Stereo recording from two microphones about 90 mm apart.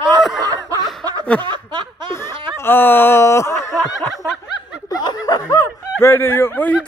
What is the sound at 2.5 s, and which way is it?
Speech, 25° left (ahead or behind).